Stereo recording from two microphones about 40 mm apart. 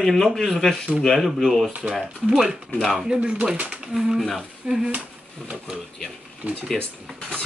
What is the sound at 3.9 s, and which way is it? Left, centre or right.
Speech, centre.